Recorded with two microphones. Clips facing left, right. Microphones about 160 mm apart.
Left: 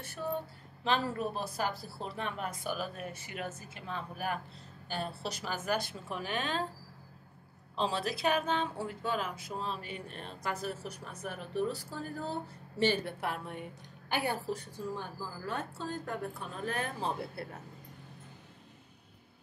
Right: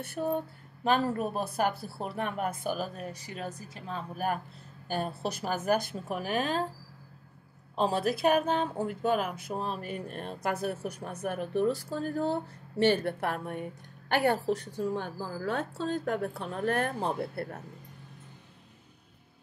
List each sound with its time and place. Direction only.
0.0 s a woman's voice: 60° right (ahead or behind)
0.8 s speech: 50° right (ahead or behind)
7.7 s speech: 50° right (ahead or behind)
12.7 s a woman's voice: 60° right (ahead or behind)